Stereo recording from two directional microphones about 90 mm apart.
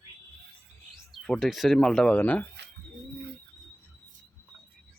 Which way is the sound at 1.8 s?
10° left (ahead or behind).